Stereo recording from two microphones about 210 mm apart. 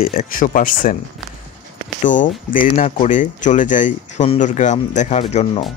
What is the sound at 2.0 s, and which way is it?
Speech, 40° left (ahead or behind).